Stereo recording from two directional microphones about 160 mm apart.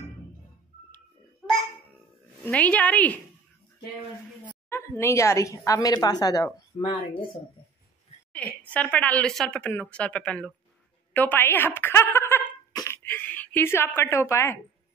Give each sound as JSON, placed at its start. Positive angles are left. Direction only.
{"t": 2.4, "sound": "a woman's voice", "side_deg": 10}
{"t": 4.6, "sound": "a woman's voice", "side_deg": 15}
{"t": 8.3, "sound": "a woman's voice", "side_deg": 10}
{"t": 11.1, "sound": "a sound", "side_deg": 10}